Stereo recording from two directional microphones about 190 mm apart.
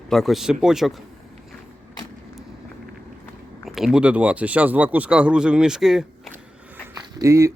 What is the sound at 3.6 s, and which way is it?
Speech, centre (ahead or behind).